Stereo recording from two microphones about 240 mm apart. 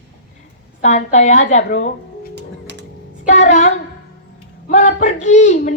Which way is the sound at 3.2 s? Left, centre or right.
Left.